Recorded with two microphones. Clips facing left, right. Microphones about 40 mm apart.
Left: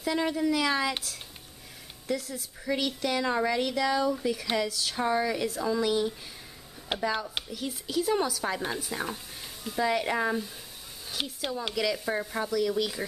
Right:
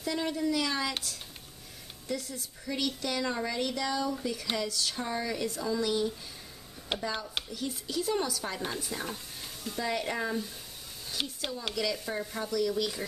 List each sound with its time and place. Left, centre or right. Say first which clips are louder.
0.0 s speech: left 4 dB; centre
2.0 s a woman's voice: left 4 dB; centre
2.8 s speech: left 1 dB; centre
11.1 s a sound: left 2 dB; centre
11.6 s speech: left 3 dB; centre